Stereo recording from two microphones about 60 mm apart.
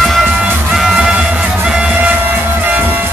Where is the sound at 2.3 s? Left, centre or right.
Right.